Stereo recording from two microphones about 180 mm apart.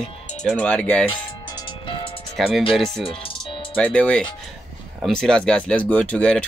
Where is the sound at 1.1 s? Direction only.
25° left (ahead or behind).